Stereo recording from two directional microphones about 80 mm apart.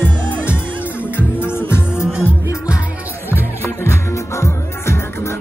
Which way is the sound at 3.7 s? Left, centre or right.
Left.